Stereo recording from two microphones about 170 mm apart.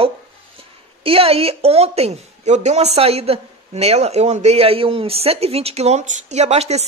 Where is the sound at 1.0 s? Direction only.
35° right (ahead or behind).